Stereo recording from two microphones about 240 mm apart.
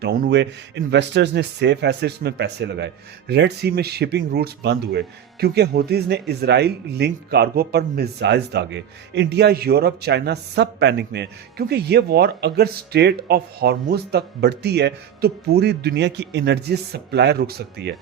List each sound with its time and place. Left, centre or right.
0.0 s speech: right